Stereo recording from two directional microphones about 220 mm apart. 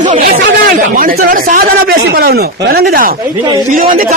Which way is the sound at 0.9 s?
40° right (ahead or behind).